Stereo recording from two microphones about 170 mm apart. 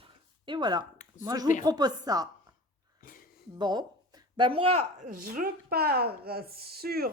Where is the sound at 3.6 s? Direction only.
25° right (ahead or behind).